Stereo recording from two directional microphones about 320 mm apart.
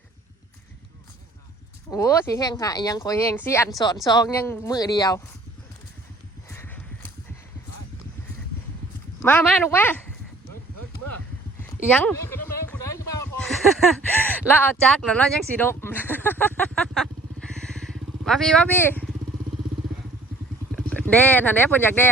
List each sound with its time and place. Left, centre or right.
1.9 s speech: centre
6.5 s horse: centre
9.2 s speech: centre
11.9 s a sound: centre
20.7 s speech: centre